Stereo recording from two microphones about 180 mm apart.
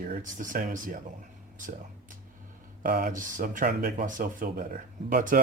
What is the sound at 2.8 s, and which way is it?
A man's voice, 55° right (ahead or behind).